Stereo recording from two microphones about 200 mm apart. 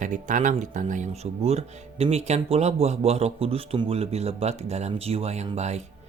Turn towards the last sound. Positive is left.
turn(degrees=-35)  # may be behind; listen again after turning